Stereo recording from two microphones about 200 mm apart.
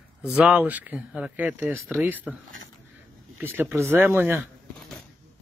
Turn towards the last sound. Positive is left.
turn(degrees=-10)  # may be behind; listen again after turning